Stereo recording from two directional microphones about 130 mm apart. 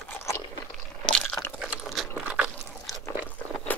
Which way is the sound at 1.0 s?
5° left (ahead or behind).